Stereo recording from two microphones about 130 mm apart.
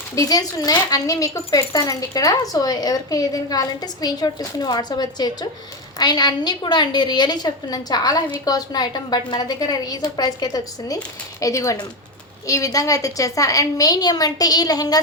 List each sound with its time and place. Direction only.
0.2 s a woman's voice: 25° left (ahead or behind)